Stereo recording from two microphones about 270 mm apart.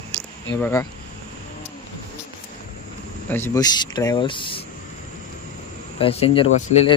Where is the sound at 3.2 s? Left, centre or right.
Centre.